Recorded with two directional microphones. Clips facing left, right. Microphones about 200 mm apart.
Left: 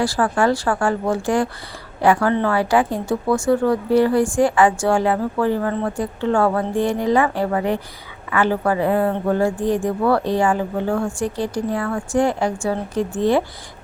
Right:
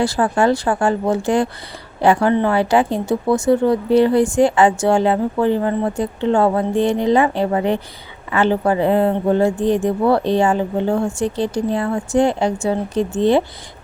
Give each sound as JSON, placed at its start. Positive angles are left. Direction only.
{"t": 0.0, "sound": "a woman's voice", "side_deg": -20}